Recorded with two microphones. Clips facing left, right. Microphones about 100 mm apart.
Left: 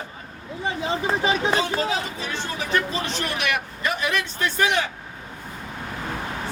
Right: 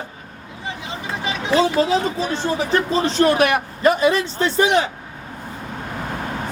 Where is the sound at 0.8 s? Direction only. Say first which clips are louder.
Left 7 dB; 35° left (ahead or behind).